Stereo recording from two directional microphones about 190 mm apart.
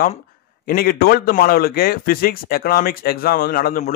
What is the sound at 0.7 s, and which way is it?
A man's voice, 50° left (ahead or behind).